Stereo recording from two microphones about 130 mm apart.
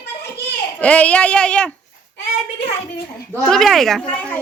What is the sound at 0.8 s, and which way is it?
Speech, 10° left (ahead or behind).